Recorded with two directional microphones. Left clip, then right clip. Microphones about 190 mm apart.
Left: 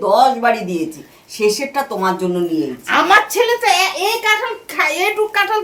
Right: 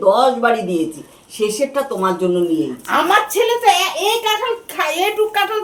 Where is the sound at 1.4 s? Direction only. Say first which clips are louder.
Left 1 dB; 10° left (ahead or behind).